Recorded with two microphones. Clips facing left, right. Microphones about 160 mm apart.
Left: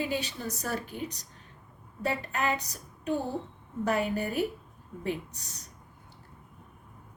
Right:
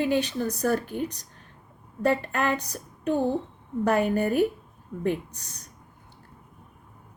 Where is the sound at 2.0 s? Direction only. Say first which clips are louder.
Right 6 dB; 55° right (ahead or behind).